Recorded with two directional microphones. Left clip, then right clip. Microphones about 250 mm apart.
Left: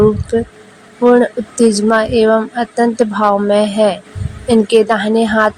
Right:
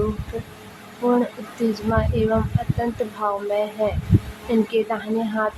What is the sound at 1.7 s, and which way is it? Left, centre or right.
Speech, left.